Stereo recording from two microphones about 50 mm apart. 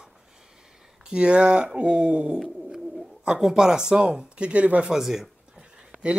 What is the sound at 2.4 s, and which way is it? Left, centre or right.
Bird, centre.